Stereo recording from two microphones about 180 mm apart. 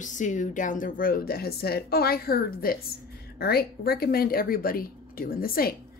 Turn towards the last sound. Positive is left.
turn(degrees=55)  # may be behind; listen again after turning